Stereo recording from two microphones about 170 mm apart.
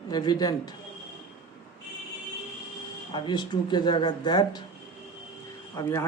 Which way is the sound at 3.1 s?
25° left (ahead or behind).